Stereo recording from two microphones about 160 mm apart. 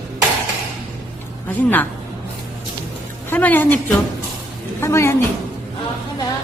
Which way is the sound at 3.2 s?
10° left (ahead or behind).